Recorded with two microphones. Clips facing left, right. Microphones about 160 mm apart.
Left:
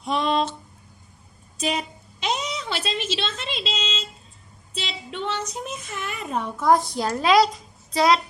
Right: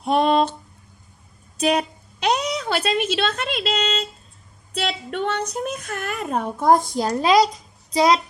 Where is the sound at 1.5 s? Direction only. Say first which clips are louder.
Right 6 dB; 60° right (ahead or behind).